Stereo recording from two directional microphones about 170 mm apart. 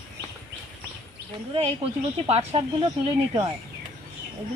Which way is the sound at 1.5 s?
35° right (ahead or behind).